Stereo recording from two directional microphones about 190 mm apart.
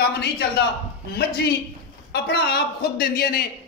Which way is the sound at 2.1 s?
55° left (ahead or behind).